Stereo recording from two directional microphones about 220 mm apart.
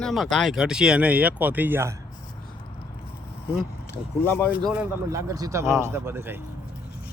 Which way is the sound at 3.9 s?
10° left (ahead or behind).